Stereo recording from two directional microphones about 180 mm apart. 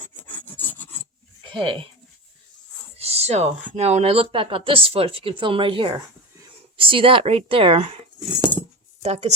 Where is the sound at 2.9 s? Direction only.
35° right (ahead or behind).